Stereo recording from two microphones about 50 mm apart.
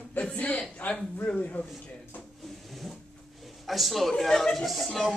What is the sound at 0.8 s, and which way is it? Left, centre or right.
Speech, left.